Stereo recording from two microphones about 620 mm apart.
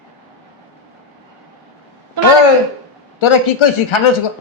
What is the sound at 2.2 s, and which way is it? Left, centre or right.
Speech, right.